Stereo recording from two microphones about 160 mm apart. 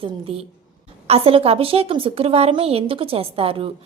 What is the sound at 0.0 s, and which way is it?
A woman's voice, 35° right (ahead or behind).